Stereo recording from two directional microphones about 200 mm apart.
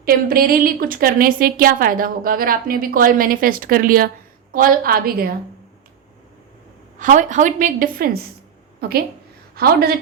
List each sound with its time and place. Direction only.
0.0 s a woman's voice: 45° right (ahead or behind)
7.0 s a woman's voice: 40° right (ahead or behind)